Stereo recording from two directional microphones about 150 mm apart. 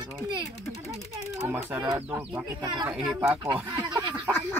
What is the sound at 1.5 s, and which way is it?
Speech, 10° right (ahead or behind).